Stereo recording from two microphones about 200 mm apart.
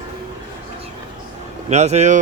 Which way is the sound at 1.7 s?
35° right (ahead or behind).